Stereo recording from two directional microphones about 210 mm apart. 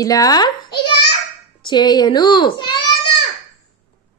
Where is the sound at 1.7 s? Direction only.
20° left (ahead or behind).